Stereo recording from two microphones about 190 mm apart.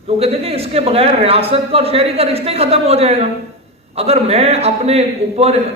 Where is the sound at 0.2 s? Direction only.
30° right (ahead or behind).